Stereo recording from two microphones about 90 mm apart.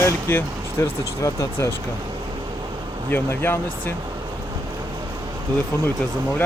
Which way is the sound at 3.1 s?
25° left (ahead or behind).